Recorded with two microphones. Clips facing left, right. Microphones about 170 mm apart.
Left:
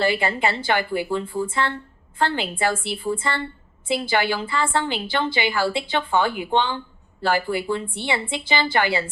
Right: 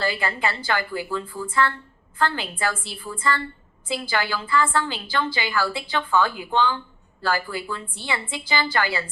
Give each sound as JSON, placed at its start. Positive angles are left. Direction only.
{"t": 0.0, "sound": "a woman's voice", "side_deg": 20}